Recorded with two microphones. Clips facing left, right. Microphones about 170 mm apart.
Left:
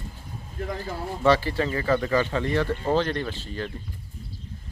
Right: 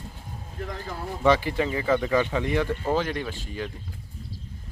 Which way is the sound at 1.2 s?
15° right (ahead or behind).